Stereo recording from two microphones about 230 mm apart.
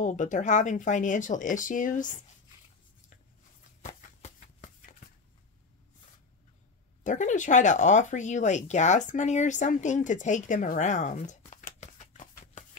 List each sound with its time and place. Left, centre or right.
0.0 s speech: left
3.8 s a sound: left
7.0 s speech: left